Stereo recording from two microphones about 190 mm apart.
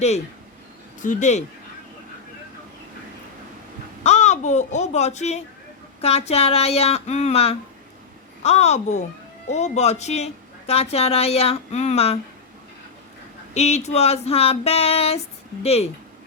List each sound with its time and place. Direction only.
1.0 s a woman's voice: 40° left (ahead or behind)
4.0 s a woman's voice: 35° left (ahead or behind)
13.5 s a woman's voice: 35° left (ahead or behind)